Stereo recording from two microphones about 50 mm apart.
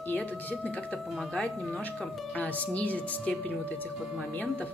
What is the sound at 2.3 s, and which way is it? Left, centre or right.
Speech, left.